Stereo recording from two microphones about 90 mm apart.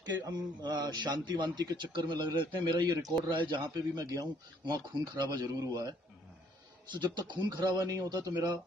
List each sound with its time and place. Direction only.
0.1 s a man's voice: 50° right (ahead or behind)
6.9 s a man's voice: 60° right (ahead or behind)